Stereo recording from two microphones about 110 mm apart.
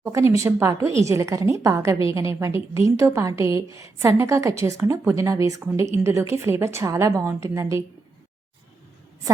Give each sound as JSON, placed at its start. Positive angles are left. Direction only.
{"t": 0.0, "sound": "a woman's voice", "side_deg": -30}